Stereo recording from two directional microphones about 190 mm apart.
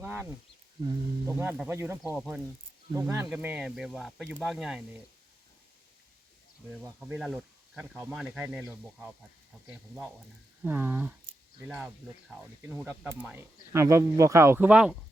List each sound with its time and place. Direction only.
0.0 s wild animals: 10° right (ahead or behind)
1.3 s speech: 10° right (ahead or behind)
2.1 s speech: 5° right (ahead or behind)
2.9 s speech: 15° right (ahead or behind)
3.2 s speech: 5° right (ahead or behind)
7.0 s speech: 5° right (ahead or behind)